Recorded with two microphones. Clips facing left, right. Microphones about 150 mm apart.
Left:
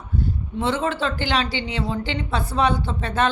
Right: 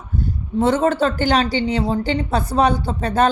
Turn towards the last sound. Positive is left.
turn(degrees=-40)  # may be behind; listen again after turning